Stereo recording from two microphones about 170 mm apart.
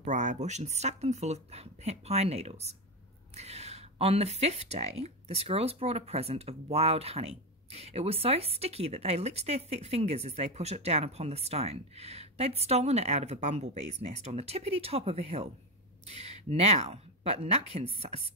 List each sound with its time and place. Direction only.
0.0 s speech: 45° right (ahead or behind)